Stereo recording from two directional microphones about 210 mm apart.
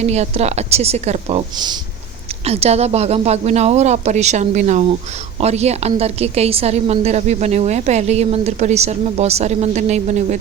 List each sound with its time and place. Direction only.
0.0 s a woman's voice: 30° right (ahead or behind)